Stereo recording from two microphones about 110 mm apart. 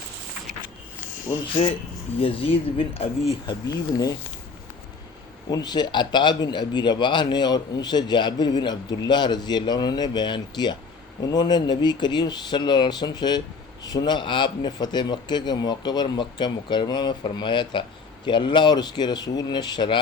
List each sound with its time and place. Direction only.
2.2 s speech: 55° left (ahead or behind)
5.5 s a man's voice: 40° left (ahead or behind)